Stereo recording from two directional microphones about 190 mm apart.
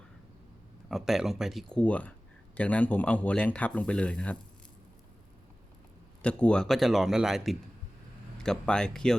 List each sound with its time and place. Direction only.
0.9 s speech: centre (ahead or behind)
6.2 s speech: 5° left (ahead or behind)